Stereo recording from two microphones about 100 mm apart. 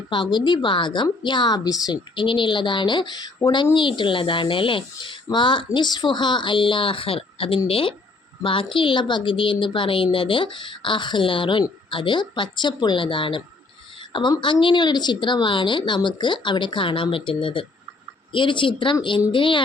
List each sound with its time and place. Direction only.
0.1 s a woman's voice: 50° left (ahead or behind)